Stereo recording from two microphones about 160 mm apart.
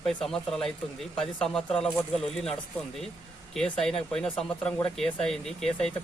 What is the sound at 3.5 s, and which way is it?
Speech, 5° left (ahead or behind).